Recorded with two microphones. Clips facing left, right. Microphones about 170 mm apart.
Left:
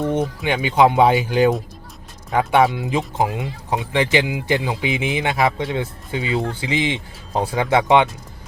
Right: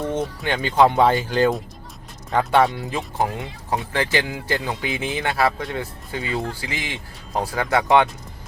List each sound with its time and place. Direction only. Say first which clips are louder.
0.0 s speech: left 4 dB; 15° left (ahead or behind)